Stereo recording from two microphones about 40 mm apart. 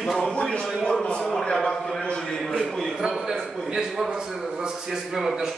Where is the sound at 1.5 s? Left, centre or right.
Centre.